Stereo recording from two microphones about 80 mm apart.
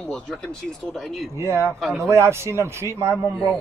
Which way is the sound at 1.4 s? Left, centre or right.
Right.